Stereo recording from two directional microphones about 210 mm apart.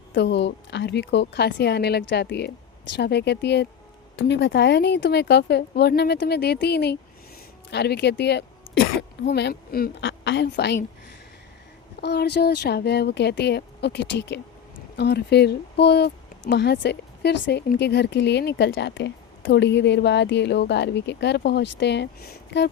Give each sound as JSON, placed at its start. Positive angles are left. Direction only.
{"t": 0.1, "sound": "a woman's voice", "side_deg": 55}
{"t": 11.9, "sound": "a woman's voice", "side_deg": 50}